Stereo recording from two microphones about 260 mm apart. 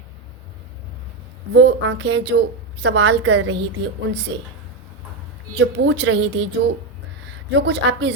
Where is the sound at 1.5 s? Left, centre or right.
Right.